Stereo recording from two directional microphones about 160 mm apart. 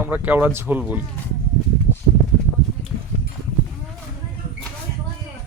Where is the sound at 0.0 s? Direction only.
10° right (ahead or behind).